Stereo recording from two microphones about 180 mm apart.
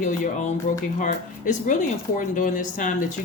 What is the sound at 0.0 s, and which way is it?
Speech, 40° left (ahead or behind).